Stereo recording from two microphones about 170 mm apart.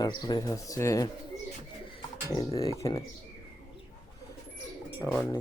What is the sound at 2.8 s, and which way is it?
Speech, 25° left (ahead or behind).